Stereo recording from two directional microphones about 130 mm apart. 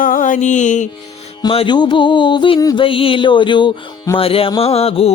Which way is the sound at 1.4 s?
40° left (ahead or behind).